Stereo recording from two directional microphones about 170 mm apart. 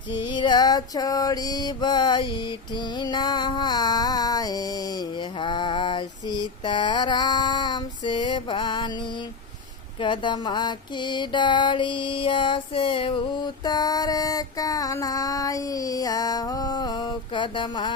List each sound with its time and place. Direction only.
0.1 s mantra: 30° left (ahead or behind)
10.0 s mantra: 30° left (ahead or behind)